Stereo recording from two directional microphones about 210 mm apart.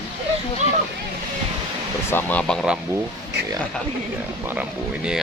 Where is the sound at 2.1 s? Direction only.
10° left (ahead or behind).